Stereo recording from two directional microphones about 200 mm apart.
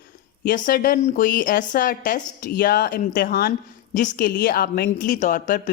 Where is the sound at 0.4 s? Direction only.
45° left (ahead or behind).